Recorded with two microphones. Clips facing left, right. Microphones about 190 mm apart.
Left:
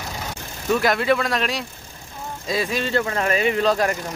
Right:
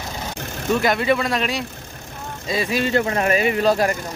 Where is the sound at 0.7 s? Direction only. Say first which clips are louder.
Even; centre (ahead or behind).